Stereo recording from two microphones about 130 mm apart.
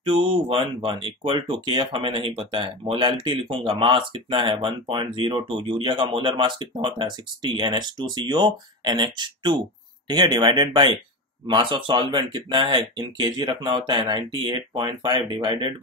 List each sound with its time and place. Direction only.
0.0 s speech: 40° right (ahead or behind)